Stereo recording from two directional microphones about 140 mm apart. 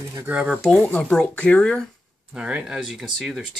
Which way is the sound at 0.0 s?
20° right (ahead or behind).